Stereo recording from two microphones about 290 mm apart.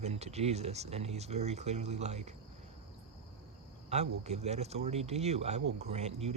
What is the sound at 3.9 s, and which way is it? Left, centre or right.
Speech, right.